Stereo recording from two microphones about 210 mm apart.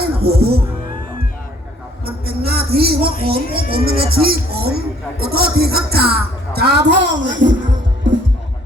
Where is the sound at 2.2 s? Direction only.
50° right (ahead or behind).